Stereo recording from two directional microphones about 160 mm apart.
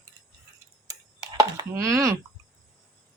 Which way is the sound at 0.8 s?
25° right (ahead or behind).